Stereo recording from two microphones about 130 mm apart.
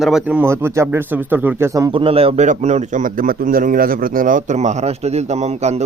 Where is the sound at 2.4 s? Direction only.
65° right (ahead or behind).